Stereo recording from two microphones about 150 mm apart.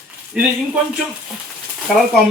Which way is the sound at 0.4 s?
5° right (ahead or behind).